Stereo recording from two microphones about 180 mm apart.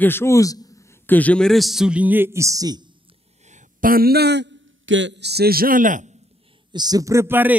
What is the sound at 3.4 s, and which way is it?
A man's voice, 45° right (ahead or behind).